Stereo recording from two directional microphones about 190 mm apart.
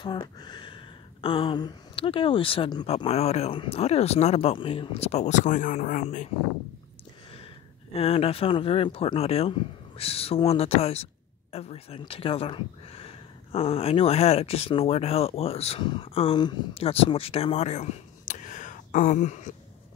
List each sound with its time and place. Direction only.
0.0 s speech: 25° left (ahead or behind); by 6.2 s 40° left (ahead or behind)
7.9 s speech: 30° left (ahead or behind)